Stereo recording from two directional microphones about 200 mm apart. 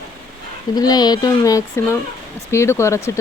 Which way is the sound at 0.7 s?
20° left (ahead or behind).